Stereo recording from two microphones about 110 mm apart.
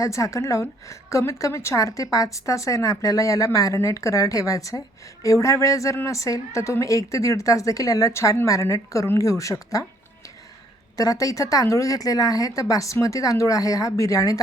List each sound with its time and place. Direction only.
0.0 s a woman's voice: 30° left (ahead or behind)
10.9 s speech: 30° left (ahead or behind)